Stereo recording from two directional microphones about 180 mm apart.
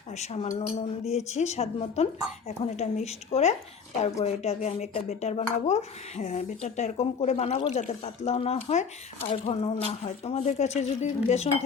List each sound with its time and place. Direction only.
0.1 s speech: 40° left (ahead or behind)